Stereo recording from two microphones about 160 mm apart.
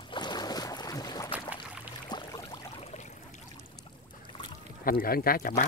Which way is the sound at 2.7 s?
45° left (ahead or behind).